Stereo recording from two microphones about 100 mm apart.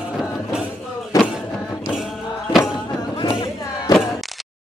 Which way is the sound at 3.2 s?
50° left (ahead or behind).